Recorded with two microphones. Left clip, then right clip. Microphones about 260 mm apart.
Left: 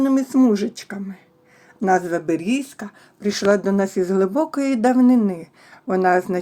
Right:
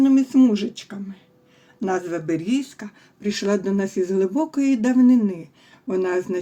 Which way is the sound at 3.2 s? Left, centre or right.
Centre.